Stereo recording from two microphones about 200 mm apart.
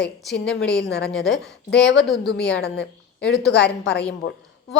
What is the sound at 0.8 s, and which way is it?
Speech, 55° left (ahead or behind).